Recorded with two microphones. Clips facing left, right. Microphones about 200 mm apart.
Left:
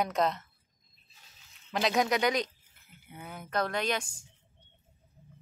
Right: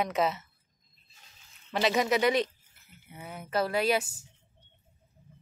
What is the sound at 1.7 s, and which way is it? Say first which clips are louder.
Speech: right 2 dB; centre (ahead or behind).